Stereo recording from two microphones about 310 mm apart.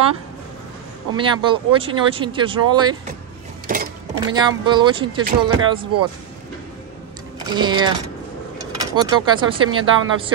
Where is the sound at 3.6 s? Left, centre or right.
Right.